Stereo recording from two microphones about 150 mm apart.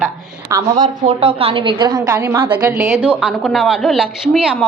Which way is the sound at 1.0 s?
40° right (ahead or behind).